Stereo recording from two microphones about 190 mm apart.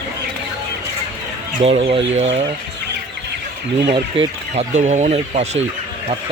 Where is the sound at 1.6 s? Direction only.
30° right (ahead or behind).